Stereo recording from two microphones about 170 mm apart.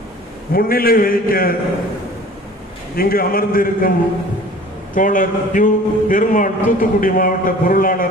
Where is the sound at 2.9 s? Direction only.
60° left (ahead or behind).